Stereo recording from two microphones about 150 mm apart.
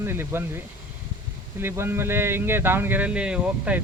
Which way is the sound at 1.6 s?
15° right (ahead or behind).